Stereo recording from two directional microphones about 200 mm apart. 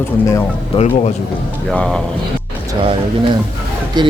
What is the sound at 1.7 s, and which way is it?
Speech, 5° left (ahead or behind).